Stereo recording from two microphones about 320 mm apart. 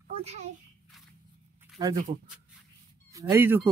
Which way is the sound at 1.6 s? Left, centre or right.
Centre.